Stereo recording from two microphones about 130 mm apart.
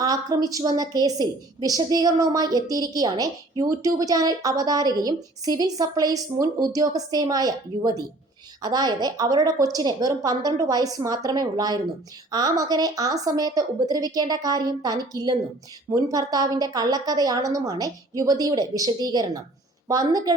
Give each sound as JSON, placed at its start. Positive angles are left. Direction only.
{"t": 0.0, "sound": "a woman's voice", "side_deg": -30}